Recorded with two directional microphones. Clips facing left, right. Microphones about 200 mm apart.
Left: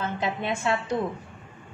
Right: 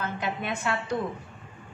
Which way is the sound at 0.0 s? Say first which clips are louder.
Left 3 dB; 25° left (ahead or behind).